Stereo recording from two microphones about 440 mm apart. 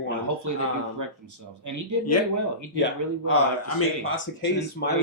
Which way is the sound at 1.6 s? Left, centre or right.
Right.